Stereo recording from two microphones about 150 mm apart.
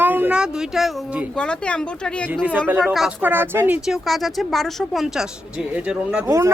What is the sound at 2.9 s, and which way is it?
Speech, 10° right (ahead or behind).